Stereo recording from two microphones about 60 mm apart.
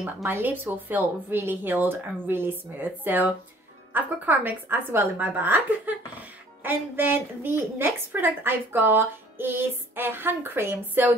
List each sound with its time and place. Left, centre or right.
0.3 s a woman's voice: right